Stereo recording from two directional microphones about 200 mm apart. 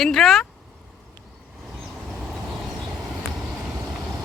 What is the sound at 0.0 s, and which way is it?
Speech, centre (ahead or behind).